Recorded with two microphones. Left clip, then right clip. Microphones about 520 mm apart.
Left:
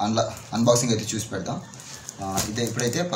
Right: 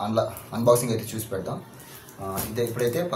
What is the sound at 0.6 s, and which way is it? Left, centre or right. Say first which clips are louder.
Speech: right 1 dB; right.